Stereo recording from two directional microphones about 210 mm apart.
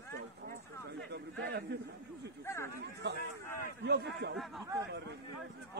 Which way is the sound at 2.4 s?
15° left (ahead or behind).